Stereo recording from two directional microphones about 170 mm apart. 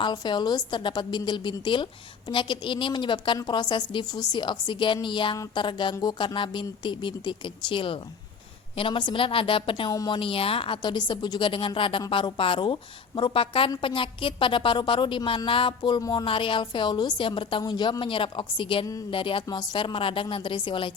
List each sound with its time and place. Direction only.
0.0 s a woman's voice: 25° left (ahead or behind)